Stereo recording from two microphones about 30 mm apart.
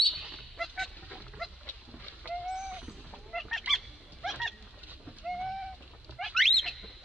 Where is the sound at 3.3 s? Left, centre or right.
Centre.